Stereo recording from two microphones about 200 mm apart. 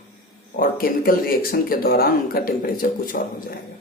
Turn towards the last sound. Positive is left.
turn(degrees=50)  # may be behind; listen again after turning